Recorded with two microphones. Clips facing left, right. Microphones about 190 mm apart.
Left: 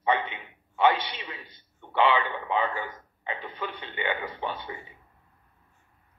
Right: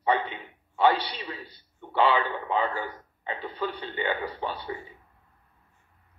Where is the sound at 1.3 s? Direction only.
35° right (ahead or behind).